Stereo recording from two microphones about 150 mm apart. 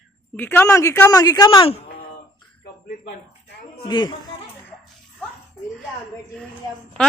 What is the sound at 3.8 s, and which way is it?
Speech, 30° left (ahead or behind).